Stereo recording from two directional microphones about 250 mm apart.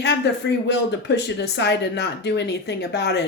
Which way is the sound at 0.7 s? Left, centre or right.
Left.